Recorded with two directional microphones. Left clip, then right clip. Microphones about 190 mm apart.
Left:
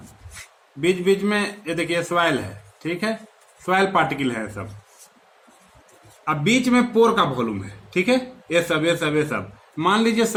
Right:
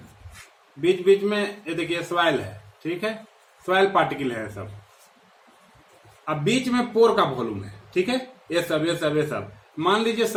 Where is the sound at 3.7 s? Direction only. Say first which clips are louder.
Left 1 dB; 35° left (ahead or behind).